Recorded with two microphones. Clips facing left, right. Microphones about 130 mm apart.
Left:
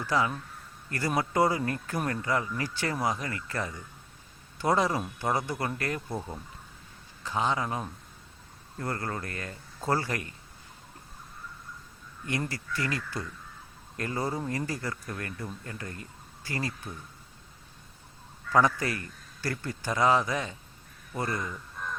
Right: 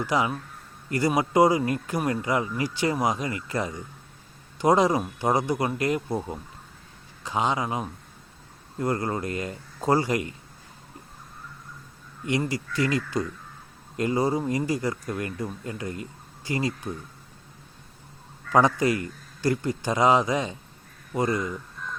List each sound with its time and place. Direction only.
0.0 s a man's voice: 15° right (ahead or behind)
12.2 s a man's voice: 15° right (ahead or behind)
18.5 s a man's voice: 20° right (ahead or behind)